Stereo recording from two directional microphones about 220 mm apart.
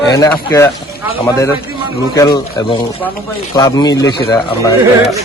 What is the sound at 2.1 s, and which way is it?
Speech, 15° left (ahead or behind).